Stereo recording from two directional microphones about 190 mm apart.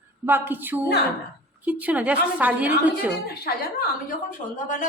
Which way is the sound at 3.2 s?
55° left (ahead or behind).